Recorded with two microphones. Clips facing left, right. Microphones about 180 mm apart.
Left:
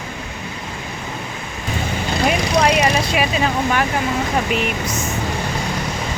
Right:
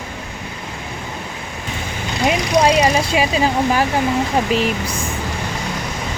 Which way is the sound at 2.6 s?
30° right (ahead or behind).